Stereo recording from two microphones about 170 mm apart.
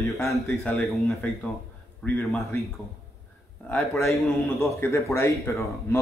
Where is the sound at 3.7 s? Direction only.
Centre (ahead or behind).